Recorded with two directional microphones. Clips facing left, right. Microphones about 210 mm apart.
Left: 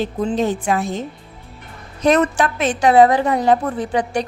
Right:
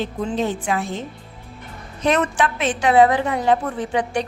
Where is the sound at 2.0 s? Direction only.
40° left (ahead or behind).